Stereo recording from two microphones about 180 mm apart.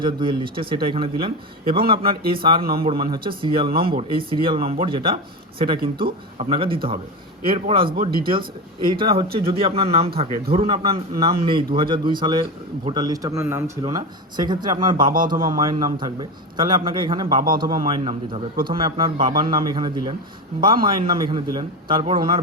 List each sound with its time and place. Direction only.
0.0 s speech: 25° right (ahead or behind)
7.9 s speech: 55° right (ahead or behind)
8.2 s speech: 30° right (ahead or behind)